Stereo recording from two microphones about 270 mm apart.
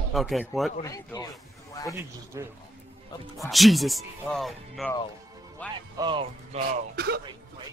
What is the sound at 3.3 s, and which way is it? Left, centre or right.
Speech, centre.